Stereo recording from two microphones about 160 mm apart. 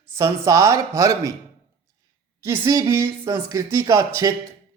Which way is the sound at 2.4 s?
20° right (ahead or behind).